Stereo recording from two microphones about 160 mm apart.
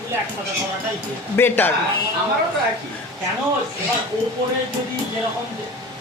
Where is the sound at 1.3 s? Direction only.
15° left (ahead or behind).